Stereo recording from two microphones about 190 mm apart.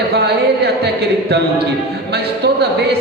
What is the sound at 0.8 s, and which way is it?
Choir, 60° right (ahead or behind).